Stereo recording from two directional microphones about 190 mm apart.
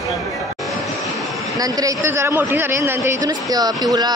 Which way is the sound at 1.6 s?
20° right (ahead or behind).